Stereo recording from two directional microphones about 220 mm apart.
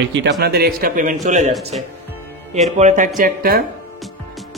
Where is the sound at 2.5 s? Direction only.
30° right (ahead or behind).